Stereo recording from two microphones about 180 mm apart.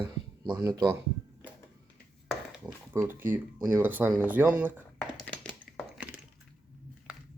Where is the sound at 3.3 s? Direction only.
10° right (ahead or behind).